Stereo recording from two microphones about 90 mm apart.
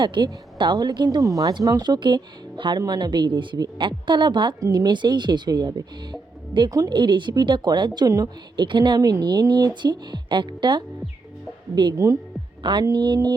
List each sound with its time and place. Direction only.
0.0 s speech: 60° right (ahead or behind)
1.2 s speech: 40° right (ahead or behind); by 4.5 s 60° right (ahead or behind)
4.6 s speech: 50° right (ahead or behind)
6.7 s speech: 45° right (ahead or behind)
6.9 s speech: 60° right (ahead or behind); by 8.6 s 45° right (ahead or behind)
8.6 s speech: 60° right (ahead or behind)
9.0 s speech: 45° right (ahead or behind)